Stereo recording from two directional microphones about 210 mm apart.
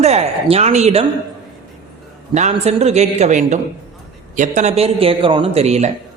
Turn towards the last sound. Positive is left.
turn(degrees=-30)  # may be behind; listen again after turning